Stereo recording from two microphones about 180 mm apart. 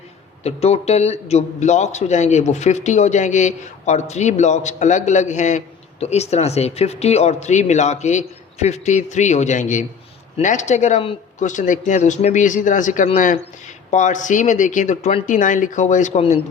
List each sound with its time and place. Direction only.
0.4 s a man's voice: 35° left (ahead or behind)